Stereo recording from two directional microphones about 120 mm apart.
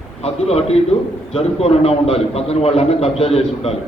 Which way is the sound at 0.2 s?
60° left (ahead or behind).